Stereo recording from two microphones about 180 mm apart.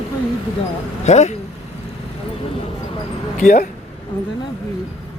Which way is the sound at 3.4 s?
40° left (ahead or behind).